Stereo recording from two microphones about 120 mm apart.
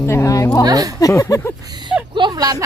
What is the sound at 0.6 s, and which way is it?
Speech, 30° right (ahead or behind).